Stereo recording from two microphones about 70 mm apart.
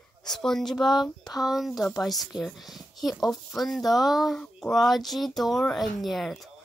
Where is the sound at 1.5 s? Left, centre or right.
Centre.